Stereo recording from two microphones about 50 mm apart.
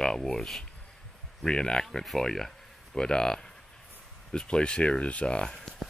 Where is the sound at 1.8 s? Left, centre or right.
Centre; by 5.6 s left.